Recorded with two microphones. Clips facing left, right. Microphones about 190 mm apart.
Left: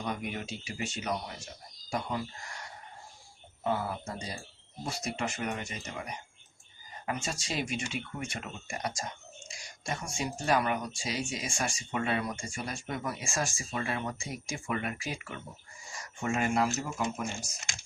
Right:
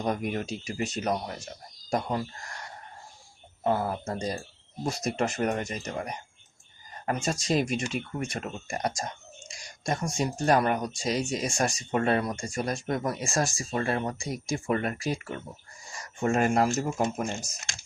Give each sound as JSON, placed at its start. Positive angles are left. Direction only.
{"t": 0.0, "sound": "speech", "side_deg": -45}
{"t": 3.6, "sound": "speech", "side_deg": -40}